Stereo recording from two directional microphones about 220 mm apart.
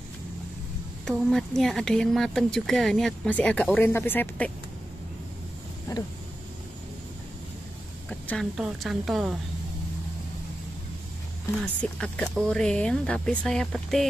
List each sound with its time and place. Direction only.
1.0 s speech: centre (ahead or behind)
5.9 s speech: 15° left (ahead or behind)
8.1 s speech: 5° left (ahead or behind)
11.6 s speech: 5° left (ahead or behind)